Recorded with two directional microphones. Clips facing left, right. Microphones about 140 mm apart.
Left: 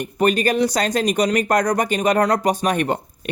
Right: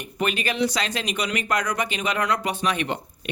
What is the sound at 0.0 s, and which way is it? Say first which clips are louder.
Speech: left 8 dB; 40° left (ahead or behind).